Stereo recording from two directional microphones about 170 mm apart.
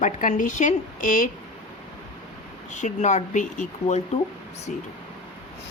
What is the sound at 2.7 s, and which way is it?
Speech, 45° left (ahead or behind).